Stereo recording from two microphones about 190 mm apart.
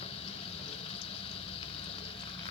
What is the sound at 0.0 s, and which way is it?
Vehicle, 30° left (ahead or behind).